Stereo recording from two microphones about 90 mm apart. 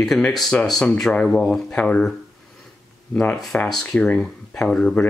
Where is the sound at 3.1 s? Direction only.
10° left (ahead or behind).